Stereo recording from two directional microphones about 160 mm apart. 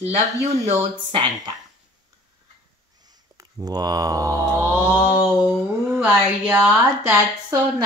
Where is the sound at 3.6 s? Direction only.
25° right (ahead or behind).